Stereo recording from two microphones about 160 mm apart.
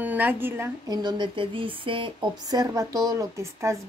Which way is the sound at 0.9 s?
25° right (ahead or behind).